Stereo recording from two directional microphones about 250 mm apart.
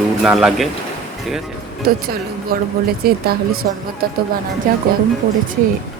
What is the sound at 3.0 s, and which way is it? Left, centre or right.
Speech, right.